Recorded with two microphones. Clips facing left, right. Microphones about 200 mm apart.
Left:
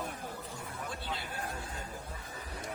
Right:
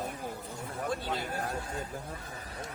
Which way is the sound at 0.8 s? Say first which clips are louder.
Right 8 dB; 45° right (ahead or behind).